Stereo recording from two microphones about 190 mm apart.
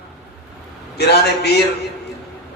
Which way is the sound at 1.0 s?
60° left (ahead or behind).